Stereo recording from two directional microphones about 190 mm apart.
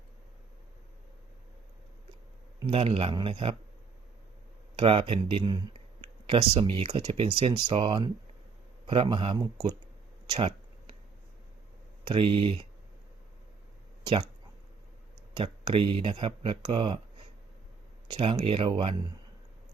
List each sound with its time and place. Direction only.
2.6 s speech: 30° right (ahead or behind)
4.8 s speech: 30° right (ahead or behind)
10.3 s a sound: 30° right (ahead or behind)
12.0 s speech: 30° right (ahead or behind)
14.0 s speech: 30° right (ahead or behind)
15.4 s speech: 30° right (ahead or behind)
18.1 s speech: 30° right (ahead or behind)